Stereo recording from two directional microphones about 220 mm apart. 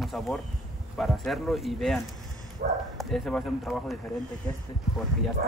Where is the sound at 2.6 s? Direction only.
40° right (ahead or behind).